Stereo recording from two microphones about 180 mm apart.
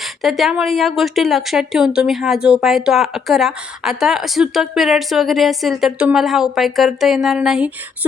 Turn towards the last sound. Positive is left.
turn(degrees=-5)  # may be behind; listen again after turning